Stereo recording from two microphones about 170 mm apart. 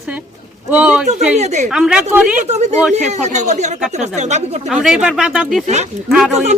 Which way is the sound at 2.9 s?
40° right (ahead or behind).